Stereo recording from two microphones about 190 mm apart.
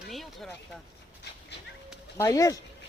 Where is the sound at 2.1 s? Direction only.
15° left (ahead or behind).